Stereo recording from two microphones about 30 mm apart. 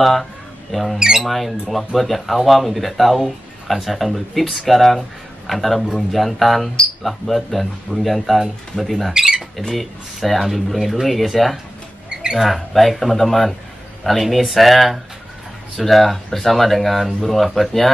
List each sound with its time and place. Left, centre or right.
0.0 s mouse: centre
0.9 s speech: right
1.2 s speech: centre
9.1 s speech: right
9.8 s speech: centre
12.1 s a sound: right
12.4 s speech: centre